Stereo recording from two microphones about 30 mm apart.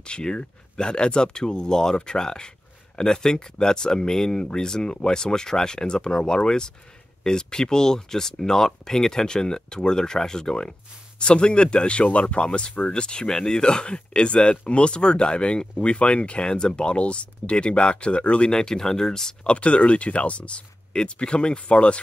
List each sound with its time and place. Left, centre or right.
0.0 s speech: left
13.2 s speech: left
15.7 s speech: left
18.5 s speech: left
19.4 s speech: left